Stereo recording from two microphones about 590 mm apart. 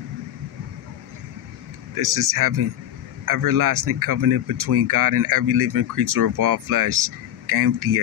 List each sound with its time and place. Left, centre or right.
2.0 s speech: right